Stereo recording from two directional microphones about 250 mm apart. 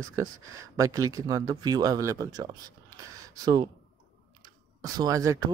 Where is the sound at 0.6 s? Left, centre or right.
Centre.